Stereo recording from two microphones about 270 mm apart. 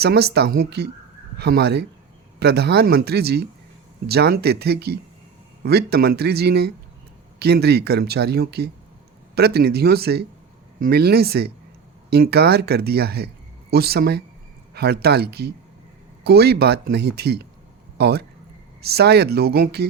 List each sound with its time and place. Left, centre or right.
0.0 s speech: right
17.9 s a sound: right
18.8 s speech: right